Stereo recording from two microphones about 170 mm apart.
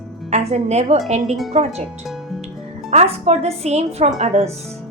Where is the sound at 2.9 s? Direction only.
40° right (ahead or behind).